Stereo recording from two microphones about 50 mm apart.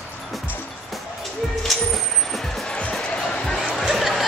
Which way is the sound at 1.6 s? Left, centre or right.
Centre.